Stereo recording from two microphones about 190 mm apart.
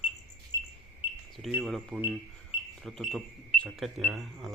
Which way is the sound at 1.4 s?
Centre (ahead or behind).